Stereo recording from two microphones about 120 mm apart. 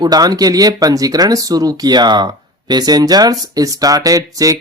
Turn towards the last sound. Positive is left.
turn(degrees=-30)  # may be behind; listen again after turning